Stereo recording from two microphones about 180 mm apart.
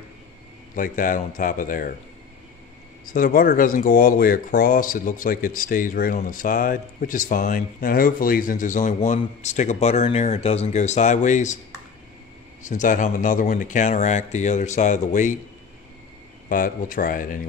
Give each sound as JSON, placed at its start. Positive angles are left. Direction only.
{"t": 0.7, "sound": "speech", "side_deg": 50}
{"t": 3.1, "sound": "speech", "side_deg": 50}
{"t": 12.6, "sound": "speech", "side_deg": 45}
{"t": 16.4, "sound": "speech", "side_deg": 50}